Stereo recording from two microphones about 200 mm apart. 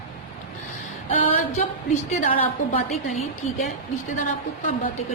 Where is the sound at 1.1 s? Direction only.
40° left (ahead or behind).